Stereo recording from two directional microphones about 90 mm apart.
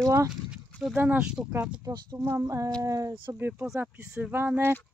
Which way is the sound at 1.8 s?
40° right (ahead or behind).